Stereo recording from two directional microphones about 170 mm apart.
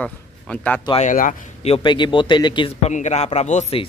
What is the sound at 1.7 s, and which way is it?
A man's voice, 25° left (ahead or behind).